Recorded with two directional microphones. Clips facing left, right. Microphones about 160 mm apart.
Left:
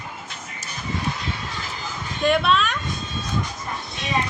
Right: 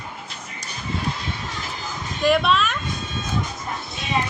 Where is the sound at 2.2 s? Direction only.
Centre (ahead or behind).